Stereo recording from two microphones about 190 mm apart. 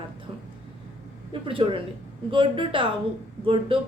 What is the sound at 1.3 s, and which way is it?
A woman's voice, 30° right (ahead or behind).